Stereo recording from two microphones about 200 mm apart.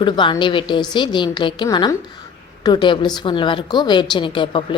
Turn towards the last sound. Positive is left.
turn(degrees=25)  # may be behind; listen again after turning